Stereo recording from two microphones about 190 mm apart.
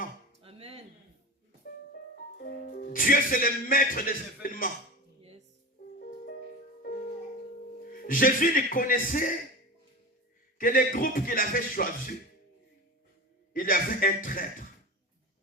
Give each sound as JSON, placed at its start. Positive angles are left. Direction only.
{"t": 0.4, "sound": "a sound", "side_deg": -30}
{"t": 2.4, "sound": "speech", "side_deg": 55}
{"t": 7.9, "sound": "speech", "side_deg": 45}
{"t": 10.6, "sound": "speech", "side_deg": 45}
{"t": 13.5, "sound": "speech", "side_deg": 45}